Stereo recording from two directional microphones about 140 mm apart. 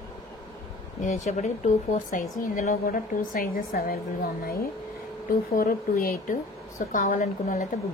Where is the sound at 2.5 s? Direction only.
85° left.